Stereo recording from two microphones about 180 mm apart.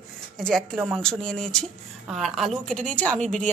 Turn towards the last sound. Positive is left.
turn(degrees=5)  # may be behind; listen again after turning